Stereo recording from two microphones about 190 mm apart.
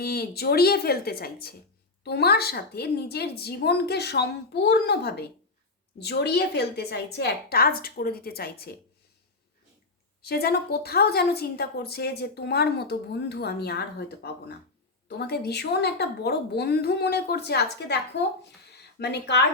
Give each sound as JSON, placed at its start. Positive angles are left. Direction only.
{"t": 0.0, "sound": "a woman's voice", "side_deg": 55}
{"t": 10.2, "sound": "a woman's voice", "side_deg": 55}